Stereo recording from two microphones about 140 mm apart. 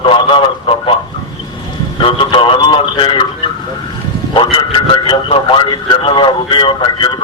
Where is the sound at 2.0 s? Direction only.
40° left (ahead or behind).